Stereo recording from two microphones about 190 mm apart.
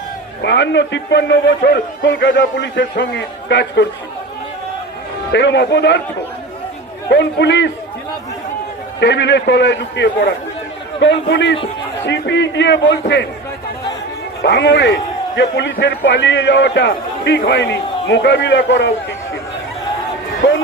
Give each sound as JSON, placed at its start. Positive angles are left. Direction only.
{"t": 0.4, "sound": "a man's voice", "side_deg": 65}
{"t": 5.3, "sound": "a man's voice", "side_deg": 65}
{"t": 7.1, "sound": "a man's voice", "side_deg": 65}
{"t": 9.0, "sound": "a man's voice", "side_deg": 65}
{"t": 14.4, "sound": "a man's voice", "side_deg": 65}